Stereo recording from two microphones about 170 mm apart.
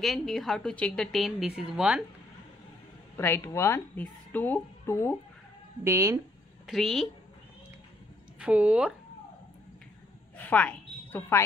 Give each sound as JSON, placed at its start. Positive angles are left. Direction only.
{"t": 0.0, "sound": "a woman's voice", "side_deg": 0}
{"t": 3.2, "sound": "a woman's voice", "side_deg": 15}
{"t": 5.9, "sound": "speech", "side_deg": -20}
{"t": 6.6, "sound": "a woman's voice", "side_deg": 0}
{"t": 8.4, "sound": "speech", "side_deg": -10}
{"t": 10.3, "sound": "a sound", "side_deg": 10}